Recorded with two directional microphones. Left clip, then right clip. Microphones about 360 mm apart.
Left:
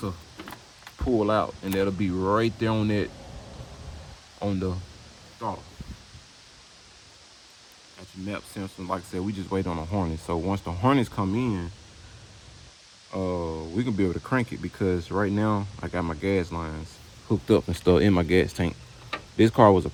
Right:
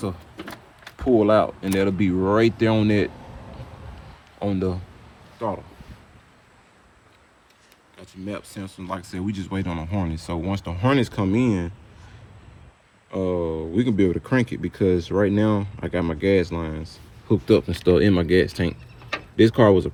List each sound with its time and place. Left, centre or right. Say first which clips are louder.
0.9 s speech: right 6 dB; centre
4.4 s speech: right 4 dB; centre
7.9 s speech: right 2 dB; centre
13.1 s speech: right 5 dB; centre